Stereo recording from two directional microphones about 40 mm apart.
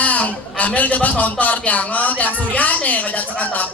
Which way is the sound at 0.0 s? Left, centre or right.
Left.